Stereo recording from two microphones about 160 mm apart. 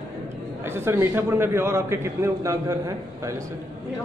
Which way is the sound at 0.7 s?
15° right (ahead or behind).